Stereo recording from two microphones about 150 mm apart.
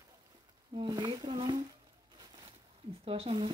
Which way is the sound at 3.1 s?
40° right (ahead or behind).